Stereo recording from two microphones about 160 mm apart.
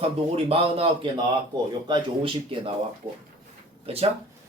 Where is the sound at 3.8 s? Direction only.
40° right (ahead or behind).